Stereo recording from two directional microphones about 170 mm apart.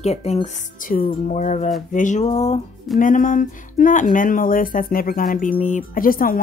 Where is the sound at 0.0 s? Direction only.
40° left (ahead or behind).